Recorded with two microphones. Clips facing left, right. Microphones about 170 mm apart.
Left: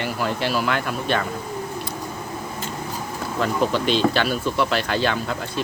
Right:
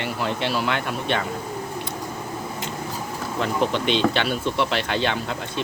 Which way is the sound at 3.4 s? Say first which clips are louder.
Left 2 dB; 25° right (ahead or behind).